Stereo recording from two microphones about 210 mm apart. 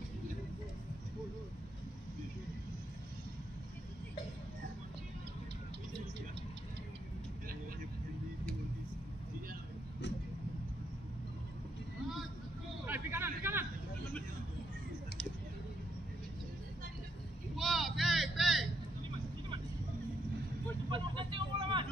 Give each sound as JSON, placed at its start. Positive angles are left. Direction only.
{"t": 12.8, "sound": "a sound", "side_deg": -10}
{"t": 17.6, "sound": "vehicle", "side_deg": 0}
{"t": 20.9, "sound": "vehicle", "side_deg": -25}